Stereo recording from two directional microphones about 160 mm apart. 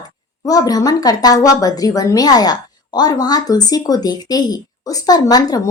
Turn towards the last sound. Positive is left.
turn(degrees=25)  # may be behind; listen again after turning